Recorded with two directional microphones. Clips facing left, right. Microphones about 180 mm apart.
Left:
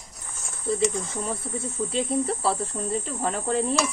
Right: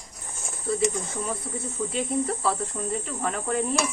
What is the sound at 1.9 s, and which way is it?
Speech, 30° left (ahead or behind).